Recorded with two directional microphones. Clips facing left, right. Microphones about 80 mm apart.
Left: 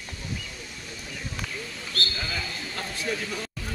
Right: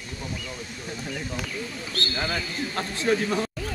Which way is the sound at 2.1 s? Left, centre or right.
Right.